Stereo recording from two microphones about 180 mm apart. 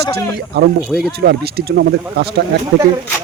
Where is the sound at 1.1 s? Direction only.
65° right (ahead or behind).